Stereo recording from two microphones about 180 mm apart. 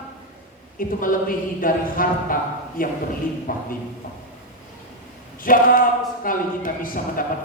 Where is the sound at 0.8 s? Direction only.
50° left (ahead or behind).